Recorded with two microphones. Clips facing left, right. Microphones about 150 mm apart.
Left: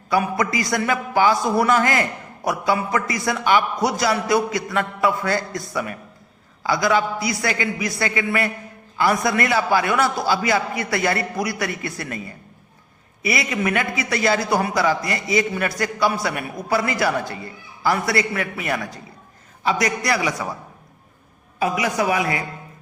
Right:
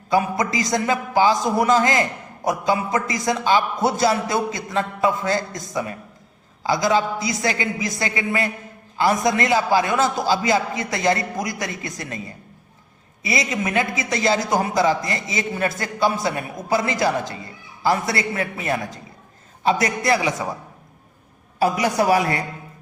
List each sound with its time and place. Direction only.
0.1 s a man's voice: 20° right (ahead or behind)
13.2 s a man's voice: 20° right (ahead or behind)
21.6 s speech: 35° right (ahead or behind)